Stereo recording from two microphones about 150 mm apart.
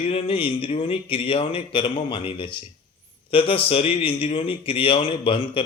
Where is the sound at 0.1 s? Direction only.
35° left (ahead or behind).